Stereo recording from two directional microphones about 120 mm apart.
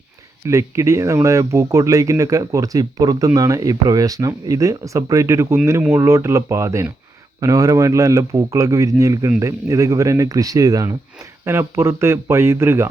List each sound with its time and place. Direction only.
0.4 s speech: 25° right (ahead or behind)